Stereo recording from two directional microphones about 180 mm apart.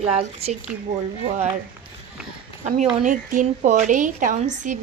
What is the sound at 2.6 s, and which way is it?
A woman's voice, 40° right (ahead or behind).